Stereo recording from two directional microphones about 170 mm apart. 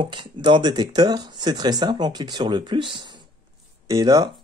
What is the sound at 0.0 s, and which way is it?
Speech, 30° right (ahead or behind).